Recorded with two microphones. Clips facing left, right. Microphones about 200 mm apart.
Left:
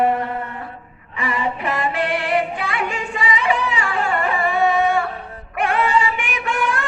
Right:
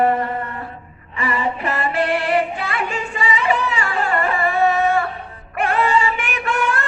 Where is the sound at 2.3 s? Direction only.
15° left (ahead or behind).